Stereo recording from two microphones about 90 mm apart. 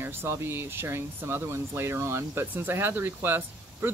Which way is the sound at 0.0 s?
25° right (ahead or behind).